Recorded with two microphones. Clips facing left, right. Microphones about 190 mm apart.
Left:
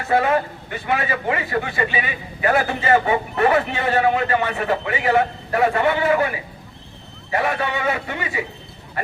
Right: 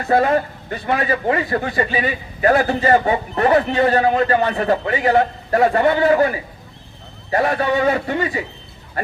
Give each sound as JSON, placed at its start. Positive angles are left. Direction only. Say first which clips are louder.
{"t": 0.0, "sound": "a man's voice", "louder": "right 3 dB", "side_deg": -35}